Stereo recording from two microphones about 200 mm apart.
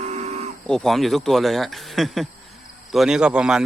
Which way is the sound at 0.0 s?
35° right (ahead or behind).